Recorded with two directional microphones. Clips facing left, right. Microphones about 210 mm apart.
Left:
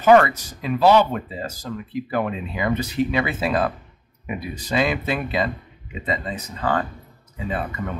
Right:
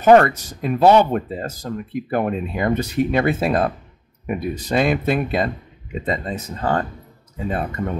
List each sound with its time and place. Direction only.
0.0 s speech: 45° right (ahead or behind)